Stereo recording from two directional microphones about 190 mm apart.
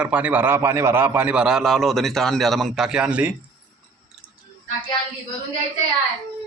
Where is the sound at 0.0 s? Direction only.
10° right (ahead or behind).